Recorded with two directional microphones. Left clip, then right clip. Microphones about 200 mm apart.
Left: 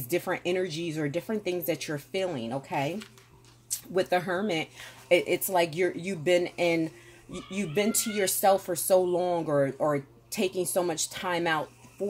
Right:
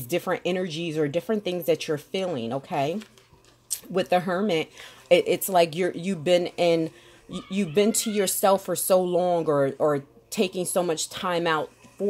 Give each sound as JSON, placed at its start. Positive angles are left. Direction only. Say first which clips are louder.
{"t": 0.1, "sound": "speech", "louder": "right 3 dB", "side_deg": -35}
{"t": 3.9, "sound": "speech", "louder": "right 3 dB", "side_deg": -40}